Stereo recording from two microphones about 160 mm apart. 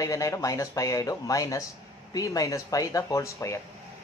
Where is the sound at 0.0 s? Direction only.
20° left (ahead or behind).